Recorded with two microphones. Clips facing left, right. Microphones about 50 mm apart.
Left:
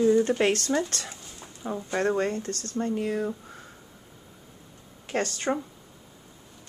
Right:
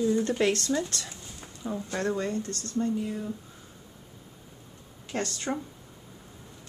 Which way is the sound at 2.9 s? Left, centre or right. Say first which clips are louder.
Left 4 dB; left.